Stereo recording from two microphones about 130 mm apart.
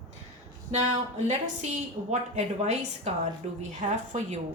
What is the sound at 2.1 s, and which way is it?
Speech, 60° right (ahead or behind).